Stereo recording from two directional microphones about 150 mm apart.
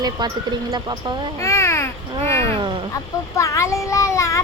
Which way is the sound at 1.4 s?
20° left (ahead or behind).